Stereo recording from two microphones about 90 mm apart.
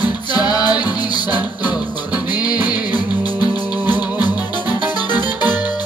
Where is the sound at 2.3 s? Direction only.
50° left (ahead or behind).